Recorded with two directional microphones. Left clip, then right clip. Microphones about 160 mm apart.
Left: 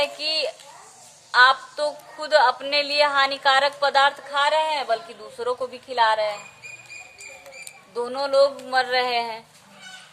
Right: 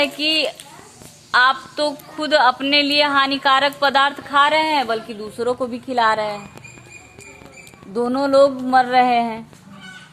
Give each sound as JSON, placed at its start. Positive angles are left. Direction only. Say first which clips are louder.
{"t": 0.0, "sound": "a woman's voice", "louder": "right 5 dB", "side_deg": -30}
{"t": 4.3, "sound": "a woman's voice", "louder": "right 5 dB", "side_deg": -40}
{"t": 7.9, "sound": "speech", "louder": "right 5 dB", "side_deg": -55}